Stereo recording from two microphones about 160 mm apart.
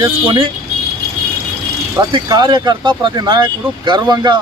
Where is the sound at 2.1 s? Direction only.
25° right (ahead or behind).